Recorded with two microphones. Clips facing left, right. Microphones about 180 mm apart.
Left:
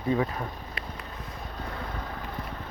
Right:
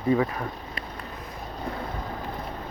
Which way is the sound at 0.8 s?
40° right (ahead or behind).